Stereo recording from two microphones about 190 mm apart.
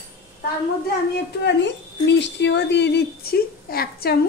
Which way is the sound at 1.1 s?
65° left (ahead or behind).